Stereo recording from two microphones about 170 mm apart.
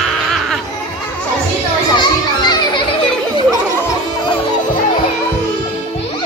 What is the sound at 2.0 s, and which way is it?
Children playing, 25° left (ahead or behind).